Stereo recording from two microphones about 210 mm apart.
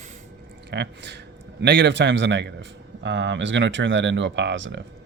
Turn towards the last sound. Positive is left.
turn(degrees=-60)  # may be behind; listen again after turning